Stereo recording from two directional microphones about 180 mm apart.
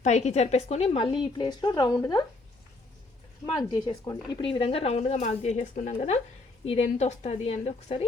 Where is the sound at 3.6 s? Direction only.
20° left (ahead or behind).